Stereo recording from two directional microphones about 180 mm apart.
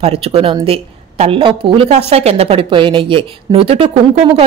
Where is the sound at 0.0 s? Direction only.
35° right (ahead or behind).